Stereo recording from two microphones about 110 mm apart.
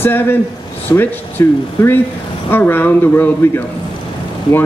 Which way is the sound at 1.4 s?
25° left (ahead or behind).